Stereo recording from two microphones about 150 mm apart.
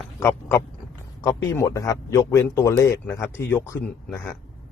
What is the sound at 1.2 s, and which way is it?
Speech, 20° left (ahead or behind).